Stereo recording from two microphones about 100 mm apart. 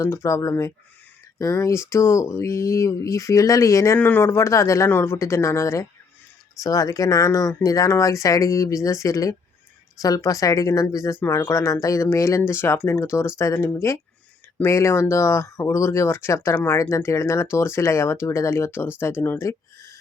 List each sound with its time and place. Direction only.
0.0 s speech: 30° left (ahead or behind)
3.9 s speech: 20° left (ahead or behind)